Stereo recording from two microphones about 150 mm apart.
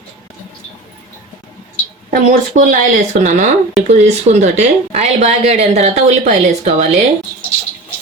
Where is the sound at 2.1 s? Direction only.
60° right (ahead or behind); by 7.0 s 45° right (ahead or behind).